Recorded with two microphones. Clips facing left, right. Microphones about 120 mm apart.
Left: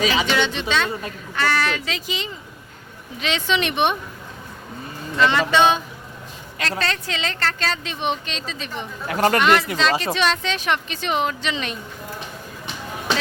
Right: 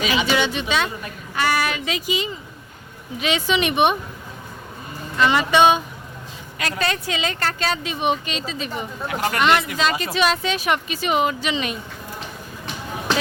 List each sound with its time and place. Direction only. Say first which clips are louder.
0.0 s speech: left 1 dB; 35° left (ahead or behind)
0.3 s a woman's voice: right 1 dB; 10° right (ahead or behind)
5.2 s a woman's voice: right 1 dB; 15° right (ahead or behind)
9.0 s speech: left 6 dB; 40° left (ahead or behind)
9.4 s a woman's voice: left 1 dB; centre (ahead or behind)